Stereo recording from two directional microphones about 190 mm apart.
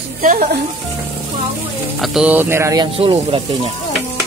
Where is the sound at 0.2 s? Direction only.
40° right (ahead or behind).